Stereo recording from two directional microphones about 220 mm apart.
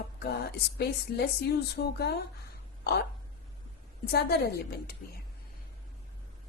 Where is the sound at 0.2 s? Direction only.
50° left (ahead or behind).